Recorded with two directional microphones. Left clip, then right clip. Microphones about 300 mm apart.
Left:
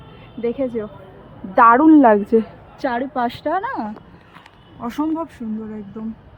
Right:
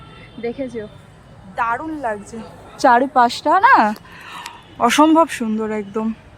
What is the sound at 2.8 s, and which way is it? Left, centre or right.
A woman's voice, centre.